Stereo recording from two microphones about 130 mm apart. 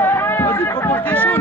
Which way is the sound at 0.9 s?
10° left (ahead or behind).